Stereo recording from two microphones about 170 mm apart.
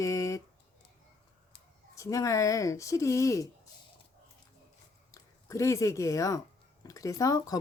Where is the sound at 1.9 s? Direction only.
20° left (ahead or behind).